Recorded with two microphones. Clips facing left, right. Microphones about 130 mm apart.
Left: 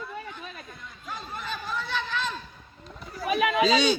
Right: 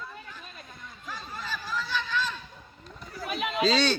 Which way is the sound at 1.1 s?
25° left (ahead or behind).